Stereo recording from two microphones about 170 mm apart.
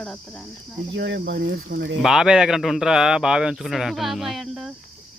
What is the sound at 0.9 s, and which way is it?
Speech, 90° right.